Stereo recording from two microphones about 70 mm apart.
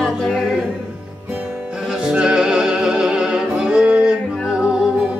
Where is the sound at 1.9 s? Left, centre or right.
Centre.